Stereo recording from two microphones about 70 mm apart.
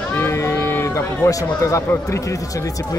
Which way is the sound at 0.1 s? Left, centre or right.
Left.